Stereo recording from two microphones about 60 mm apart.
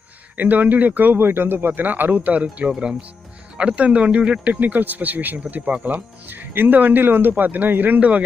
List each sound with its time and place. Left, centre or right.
0.3 s speech: right